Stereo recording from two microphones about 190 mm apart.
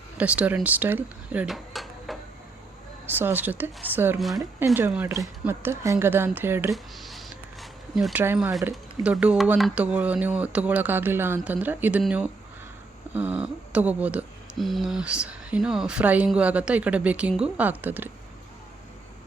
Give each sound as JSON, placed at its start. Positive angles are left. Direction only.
{"t": 0.2, "sound": "speech", "side_deg": -5}
{"t": 3.1, "sound": "speech", "side_deg": -10}
{"t": 4.2, "sound": "speech", "side_deg": 0}
{"t": 4.6, "sound": "speech", "side_deg": -10}
{"t": 6.7, "sound": "a sound", "side_deg": 0}
{"t": 8.7, "sound": "speech", "side_deg": -5}